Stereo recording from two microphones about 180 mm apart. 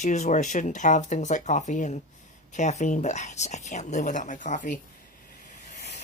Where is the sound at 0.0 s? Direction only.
40° left (ahead or behind).